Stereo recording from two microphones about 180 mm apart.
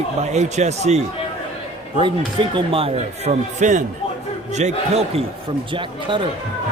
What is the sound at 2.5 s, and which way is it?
Speech, 30° right (ahead or behind).